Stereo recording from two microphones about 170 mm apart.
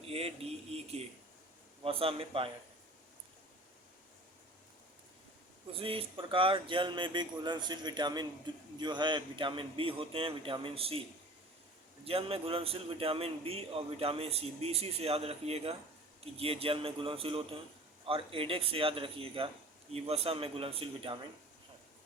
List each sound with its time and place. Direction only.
0.0 s a man's voice: 35° right (ahead or behind)
5.7 s a man's voice: 30° right (ahead or behind)
12.0 s a man's voice: 35° right (ahead or behind)